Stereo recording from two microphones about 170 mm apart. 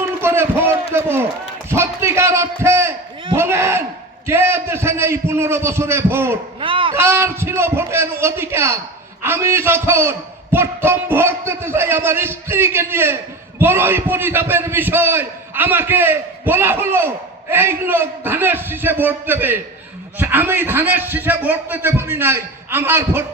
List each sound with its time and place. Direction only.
0.2 s a sound: 15° right (ahead or behind)
1.7 s a man's voice: 15° right (ahead or behind)
3.3 s a sound: 15° right (ahead or behind)
4.3 s a man's voice: 15° right (ahead or behind)
6.6 s speech: 30° right (ahead or behind)
6.9 s a man's voice: 15° right (ahead or behind)